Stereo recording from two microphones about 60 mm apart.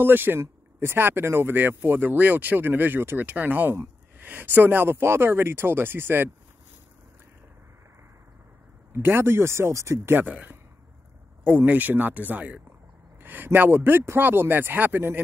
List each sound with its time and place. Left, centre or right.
0.0 s speech: right
8.9 s speech: right
11.5 s speech: right
13.2 s speech: right